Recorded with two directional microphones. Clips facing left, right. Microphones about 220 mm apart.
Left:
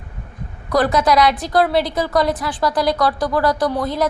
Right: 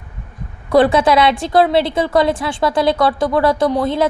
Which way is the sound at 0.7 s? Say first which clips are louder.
Right 4 dB; 30° right (ahead or behind).